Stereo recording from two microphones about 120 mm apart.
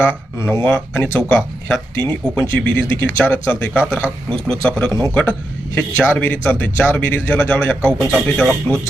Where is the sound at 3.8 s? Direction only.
10° right (ahead or behind).